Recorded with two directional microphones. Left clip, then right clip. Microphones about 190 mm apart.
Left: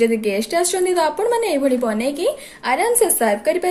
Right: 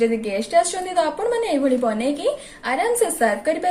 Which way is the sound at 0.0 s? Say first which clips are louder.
Left 3 dB; 45° left (ahead or behind).